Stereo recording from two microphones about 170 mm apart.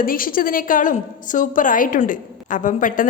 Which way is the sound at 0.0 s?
55° left (ahead or behind).